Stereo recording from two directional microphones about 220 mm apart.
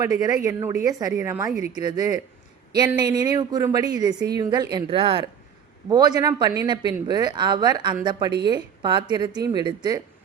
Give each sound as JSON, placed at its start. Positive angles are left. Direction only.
{"t": 0.0, "sound": "a woman's voice", "side_deg": -15}